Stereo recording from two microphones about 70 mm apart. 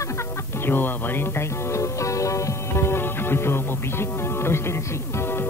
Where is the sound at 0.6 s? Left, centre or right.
Left.